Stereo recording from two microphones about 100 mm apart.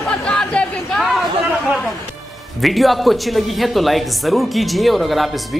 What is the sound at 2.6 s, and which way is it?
A man's voice, centre (ahead or behind).